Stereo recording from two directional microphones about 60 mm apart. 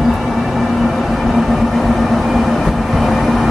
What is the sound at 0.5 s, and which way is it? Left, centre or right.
Train, centre.